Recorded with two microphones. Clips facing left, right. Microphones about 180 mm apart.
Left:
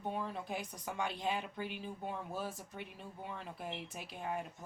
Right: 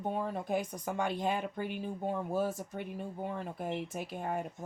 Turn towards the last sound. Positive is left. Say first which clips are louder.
# right 5 dB
turn(degrees=-45)  # may be behind; listen again after turning